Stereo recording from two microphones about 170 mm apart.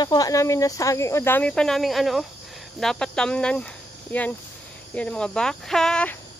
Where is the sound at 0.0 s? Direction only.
20° left (ahead or behind); by 6.1 s 5° left (ahead or behind).